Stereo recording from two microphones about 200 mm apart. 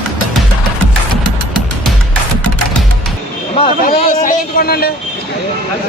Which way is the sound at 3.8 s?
45° left (ahead or behind).